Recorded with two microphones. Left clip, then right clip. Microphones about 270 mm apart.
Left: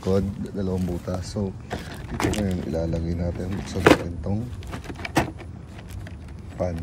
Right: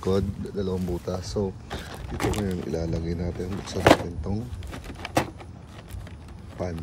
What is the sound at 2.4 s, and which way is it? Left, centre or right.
Speech, centre.